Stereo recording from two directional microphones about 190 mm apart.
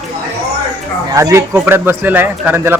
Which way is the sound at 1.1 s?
15° right (ahead or behind).